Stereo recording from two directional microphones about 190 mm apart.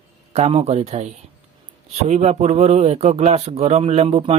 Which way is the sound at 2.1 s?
35° right (ahead or behind).